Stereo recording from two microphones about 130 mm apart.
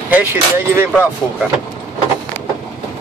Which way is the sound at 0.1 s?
15° right (ahead or behind).